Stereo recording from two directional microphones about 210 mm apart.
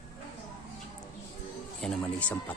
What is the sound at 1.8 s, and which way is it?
Speech, 5° left (ahead or behind).